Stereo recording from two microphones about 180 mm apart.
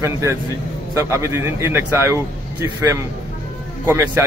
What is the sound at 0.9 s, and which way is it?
A man's voice, 15° right (ahead or behind).